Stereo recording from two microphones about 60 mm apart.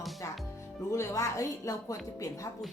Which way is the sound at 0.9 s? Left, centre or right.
Left.